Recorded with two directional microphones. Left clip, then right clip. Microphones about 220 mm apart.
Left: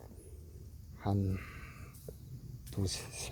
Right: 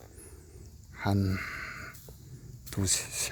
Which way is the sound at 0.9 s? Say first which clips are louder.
Right 6 dB; 20° right (ahead or behind).